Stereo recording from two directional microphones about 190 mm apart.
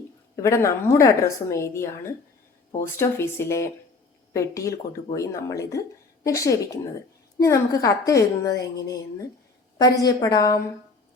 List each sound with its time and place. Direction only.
0.3 s a woman's voice: 15° left (ahead or behind)